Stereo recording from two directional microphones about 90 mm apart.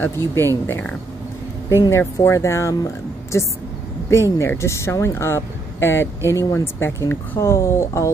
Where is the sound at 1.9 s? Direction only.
30° left (ahead or behind).